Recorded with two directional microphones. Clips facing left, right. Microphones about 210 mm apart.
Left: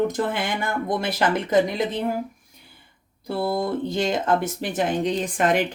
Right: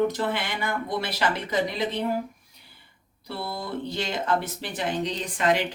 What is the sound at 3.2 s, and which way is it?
A woman's voice, 50° left (ahead or behind).